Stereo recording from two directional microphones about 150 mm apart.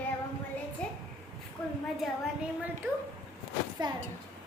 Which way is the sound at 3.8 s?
30° right (ahead or behind).